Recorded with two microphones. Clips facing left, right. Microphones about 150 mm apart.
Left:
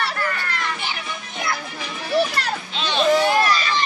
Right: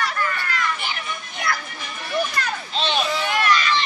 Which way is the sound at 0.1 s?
40° left (ahead or behind).